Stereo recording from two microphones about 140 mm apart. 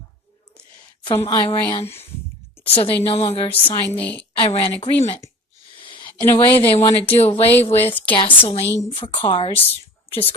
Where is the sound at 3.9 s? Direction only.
10° left (ahead or behind).